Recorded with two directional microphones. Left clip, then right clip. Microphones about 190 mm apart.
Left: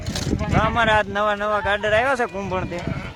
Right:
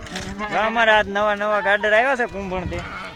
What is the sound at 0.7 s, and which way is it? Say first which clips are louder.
Speech: right 4 dB; 20° left (ahead or behind).